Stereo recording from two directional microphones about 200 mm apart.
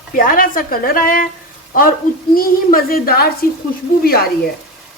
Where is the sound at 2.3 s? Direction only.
45° left (ahead or behind).